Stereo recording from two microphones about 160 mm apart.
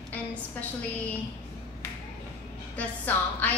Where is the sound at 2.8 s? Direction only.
10° left (ahead or behind).